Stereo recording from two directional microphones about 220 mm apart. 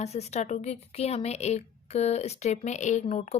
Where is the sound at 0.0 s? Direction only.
30° left (ahead or behind).